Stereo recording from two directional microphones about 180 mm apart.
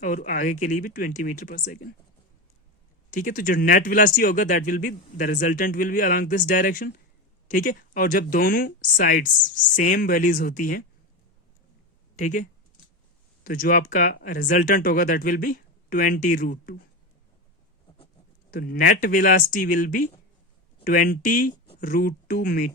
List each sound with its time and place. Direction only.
0.0 s speech: 50° left (ahead or behind)
3.1 s speech: 50° left (ahead or behind)
12.1 s speech: 45° left (ahead or behind)
18.5 s speech: 55° left (ahead or behind)